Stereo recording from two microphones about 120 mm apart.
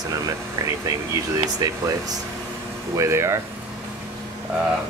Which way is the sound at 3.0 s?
25° right (ahead or behind).